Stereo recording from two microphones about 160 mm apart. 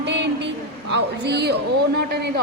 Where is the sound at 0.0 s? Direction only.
90° right.